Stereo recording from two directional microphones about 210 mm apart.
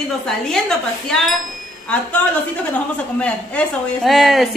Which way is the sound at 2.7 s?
5° left (ahead or behind).